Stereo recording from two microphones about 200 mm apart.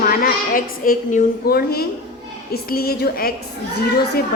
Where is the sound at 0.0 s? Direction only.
45° left (ahead or behind).